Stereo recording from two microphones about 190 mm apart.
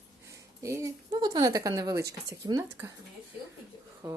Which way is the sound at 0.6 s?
15° right (ahead or behind).